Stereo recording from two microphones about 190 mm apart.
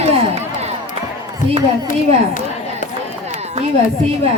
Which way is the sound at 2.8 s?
40° left (ahead or behind).